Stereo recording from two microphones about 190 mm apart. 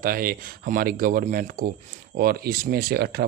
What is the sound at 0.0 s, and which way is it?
Speech, 50° right (ahead or behind).